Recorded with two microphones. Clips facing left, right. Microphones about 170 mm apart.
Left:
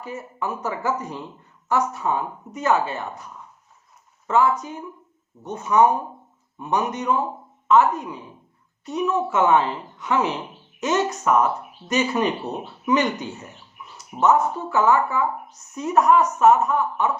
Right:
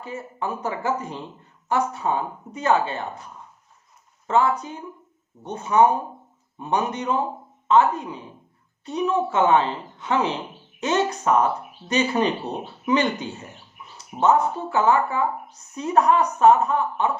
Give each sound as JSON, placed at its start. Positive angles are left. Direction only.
{"t": 0.0, "sound": "a woman's voice", "side_deg": -25}
{"t": 4.3, "sound": "a woman's voice", "side_deg": -30}
{"t": 13.9, "sound": "a sound", "side_deg": -30}
{"t": 14.7, "sound": "a woman's voice", "side_deg": -30}